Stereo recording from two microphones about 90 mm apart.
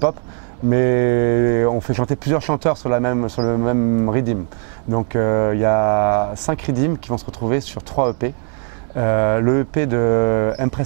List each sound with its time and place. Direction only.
0.7 s speech: 20° right (ahead or behind)